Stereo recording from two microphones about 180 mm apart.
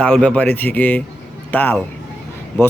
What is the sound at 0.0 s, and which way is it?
Speech, 5° left (ahead or behind).